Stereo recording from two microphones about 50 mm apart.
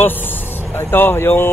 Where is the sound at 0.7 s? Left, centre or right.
Left.